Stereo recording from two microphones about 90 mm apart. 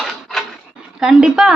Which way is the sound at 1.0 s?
10° right (ahead or behind).